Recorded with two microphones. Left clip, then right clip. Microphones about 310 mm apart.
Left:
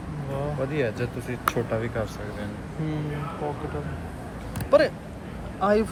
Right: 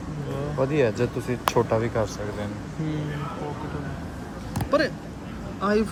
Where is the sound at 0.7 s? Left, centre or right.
Right.